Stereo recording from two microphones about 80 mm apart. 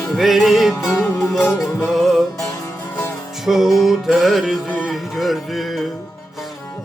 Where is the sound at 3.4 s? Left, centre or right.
Centre.